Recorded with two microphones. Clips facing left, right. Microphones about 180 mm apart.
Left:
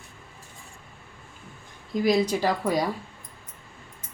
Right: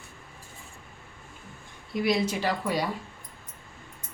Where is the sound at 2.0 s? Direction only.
40° left (ahead or behind).